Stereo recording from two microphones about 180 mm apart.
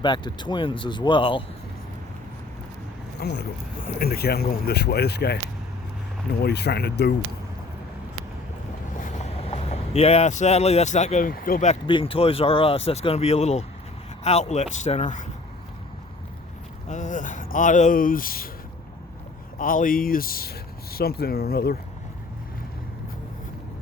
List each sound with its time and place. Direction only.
0.0 s speech: 25° left (ahead or behind)
3.2 s speech: 70° left (ahead or behind)
3.8 s speech: 55° left (ahead or behind)
6.4 s speech: 65° left (ahead or behind)
9.0 s speech: 40° left (ahead or behind)
11.9 s speech: 30° left (ahead or behind)
16.9 s speech: 45° left (ahead or behind)
19.5 s speech: 50° left (ahead or behind)